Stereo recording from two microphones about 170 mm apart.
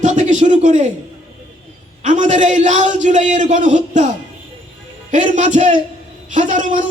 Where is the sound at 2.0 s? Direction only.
45° right (ahead or behind).